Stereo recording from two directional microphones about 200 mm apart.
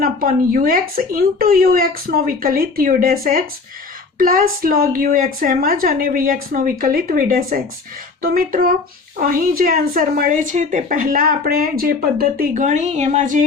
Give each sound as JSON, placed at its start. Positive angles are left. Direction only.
{"t": 0.0, "sound": "speech", "side_deg": -45}